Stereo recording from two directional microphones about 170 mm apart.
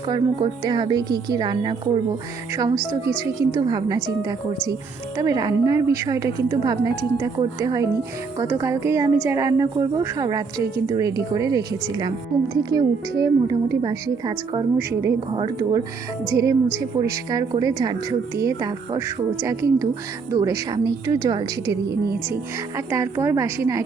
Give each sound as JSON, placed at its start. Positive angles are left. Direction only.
{"t": 0.1, "sound": "a woman's voice", "side_deg": -25}
{"t": 3.5, "sound": "a woman's voice", "side_deg": -25}
{"t": 5.1, "sound": "a woman's voice", "side_deg": -20}
{"t": 21.8, "sound": "a woman's voice", "side_deg": -65}
{"t": 22.9, "sound": "a woman's voice", "side_deg": -15}